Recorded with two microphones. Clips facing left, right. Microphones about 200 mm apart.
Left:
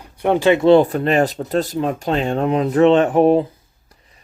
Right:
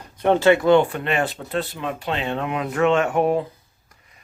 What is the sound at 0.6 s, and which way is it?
Speech, 35° left (ahead or behind).